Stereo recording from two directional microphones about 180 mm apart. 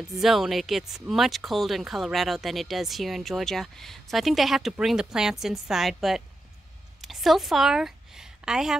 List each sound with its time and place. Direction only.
0.0 s a woman's voice: centre (ahead or behind)